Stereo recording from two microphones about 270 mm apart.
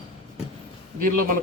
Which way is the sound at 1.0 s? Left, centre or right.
Right.